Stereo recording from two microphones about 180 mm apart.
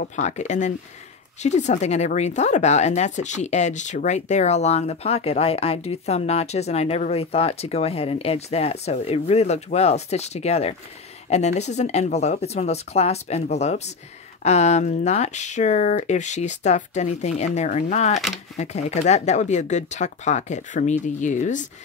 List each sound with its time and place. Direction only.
0.0 s speech: 40° left (ahead or behind)